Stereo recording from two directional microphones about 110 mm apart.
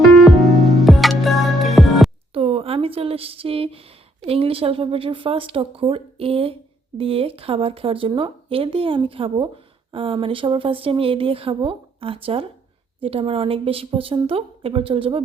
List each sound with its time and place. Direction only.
0.2 s music: centre (ahead or behind)
2.3 s speech: 60° right (ahead or behind)